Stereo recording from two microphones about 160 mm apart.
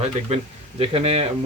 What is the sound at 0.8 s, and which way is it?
Speech, 40° right (ahead or behind).